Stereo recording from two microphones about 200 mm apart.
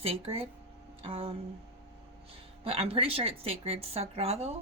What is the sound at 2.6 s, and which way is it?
A woman's voice, 30° right (ahead or behind).